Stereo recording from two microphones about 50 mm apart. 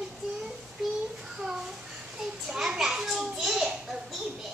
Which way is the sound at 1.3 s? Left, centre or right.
Centre.